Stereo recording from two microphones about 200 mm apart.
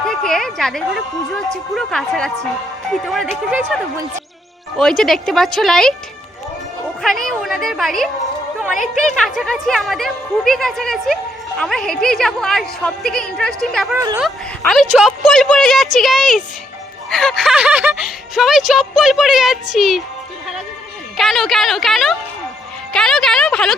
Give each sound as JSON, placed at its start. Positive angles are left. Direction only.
{"t": 0.1, "sound": "a woman's voice", "side_deg": 0}
{"t": 4.8, "sound": "a woman's voice", "side_deg": 0}
{"t": 7.0, "sound": "a woman's voice", "side_deg": 0}
{"t": 9.1, "sound": "a woman's voice", "side_deg": 0}
{"t": 13.9, "sound": "speech", "side_deg": -15}
{"t": 14.2, "sound": "a woman's voice", "side_deg": 0}
{"t": 21.2, "sound": "a woman's voice", "side_deg": 0}